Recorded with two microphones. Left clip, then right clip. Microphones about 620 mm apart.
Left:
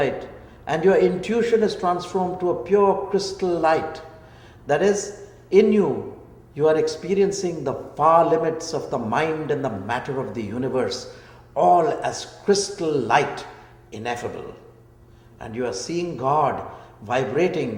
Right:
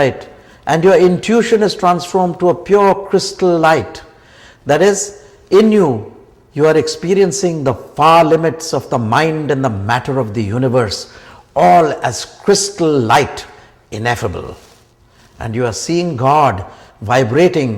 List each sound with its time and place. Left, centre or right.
0.0 s a man's voice: right
15.4 s a man's voice: right